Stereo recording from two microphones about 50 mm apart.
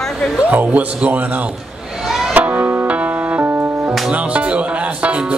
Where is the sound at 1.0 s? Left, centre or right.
Right.